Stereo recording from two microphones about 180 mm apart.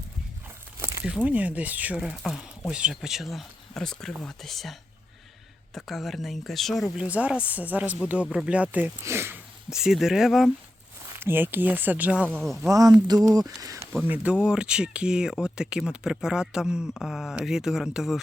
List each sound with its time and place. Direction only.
0.8 s a sound: 15° right (ahead or behind)
1.0 s speech: 5° right (ahead or behind)
9.6 s speech: 5° right (ahead or behind)
11.2 s speech: 10° right (ahead or behind)
12.5 s speech: 20° right (ahead or behind)